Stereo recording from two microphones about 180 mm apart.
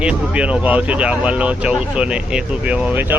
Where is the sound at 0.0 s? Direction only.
5° right (ahead or behind).